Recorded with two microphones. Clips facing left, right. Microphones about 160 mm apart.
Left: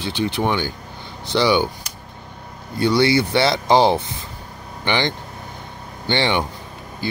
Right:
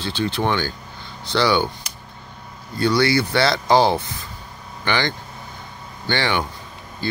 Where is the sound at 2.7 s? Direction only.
20° left (ahead or behind).